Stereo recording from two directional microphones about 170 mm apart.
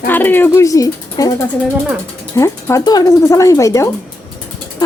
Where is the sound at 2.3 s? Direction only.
15° left (ahead or behind).